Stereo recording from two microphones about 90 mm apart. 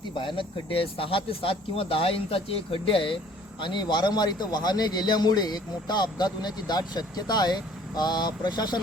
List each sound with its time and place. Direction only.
0.1 s speech: 70° left (ahead or behind)
3.6 s a man's voice: 60° left (ahead or behind)